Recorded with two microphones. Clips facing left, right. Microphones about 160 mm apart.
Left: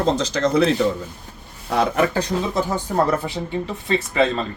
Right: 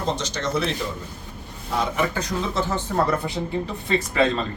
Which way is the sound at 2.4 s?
15° left (ahead or behind).